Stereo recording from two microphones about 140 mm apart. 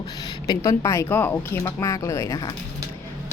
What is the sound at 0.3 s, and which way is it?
Speech, 30° left (ahead or behind).